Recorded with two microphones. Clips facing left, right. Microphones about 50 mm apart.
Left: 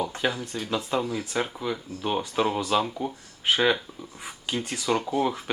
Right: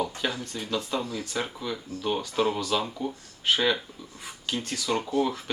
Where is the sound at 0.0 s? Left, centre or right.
Centre.